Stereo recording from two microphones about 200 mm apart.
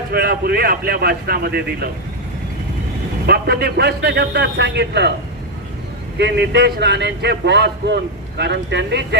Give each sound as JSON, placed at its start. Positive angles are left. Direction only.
{"t": 0.1, "sound": "a man's voice", "side_deg": -50}
{"t": 3.2, "sound": "a man's voice", "side_deg": -50}
{"t": 6.1, "sound": "a man's voice", "side_deg": -60}